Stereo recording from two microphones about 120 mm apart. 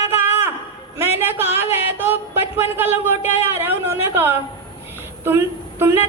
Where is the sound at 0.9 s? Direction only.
20° right (ahead or behind).